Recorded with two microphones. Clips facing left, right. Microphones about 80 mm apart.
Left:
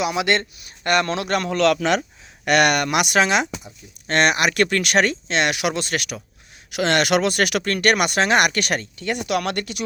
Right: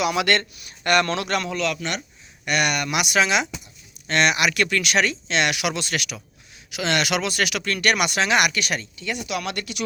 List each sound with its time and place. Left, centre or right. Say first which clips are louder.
0.0 s a man's voice: even; left
1.5 s a man's voice: left 8 dB; left
2.8 s speech: left 3 dB; left
6.7 s speech: left 4 dB; left